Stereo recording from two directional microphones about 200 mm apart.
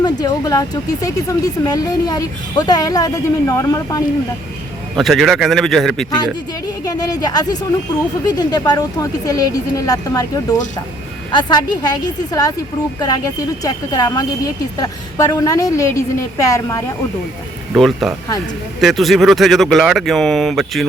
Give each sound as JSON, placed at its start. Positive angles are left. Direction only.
{"t": 0.0, "sound": "speech", "side_deg": 20}
{"t": 4.9, "sound": "speech", "side_deg": 0}
{"t": 6.8, "sound": "speech", "side_deg": 20}
{"t": 17.7, "sound": "speech", "side_deg": 0}